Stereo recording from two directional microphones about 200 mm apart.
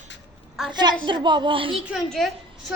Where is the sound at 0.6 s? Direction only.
5° right (ahead or behind).